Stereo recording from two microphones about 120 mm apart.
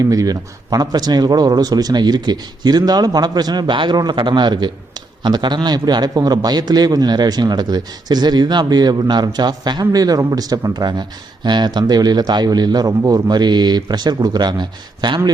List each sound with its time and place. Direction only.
0.0 s a man's voice: 30° right (ahead or behind)